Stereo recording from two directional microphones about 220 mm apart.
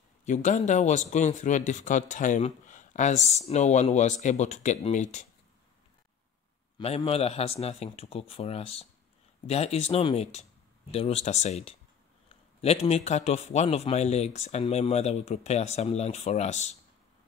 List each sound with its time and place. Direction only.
0.2 s speech: 35° left (ahead or behind)
6.8 s a man's voice: 25° left (ahead or behind)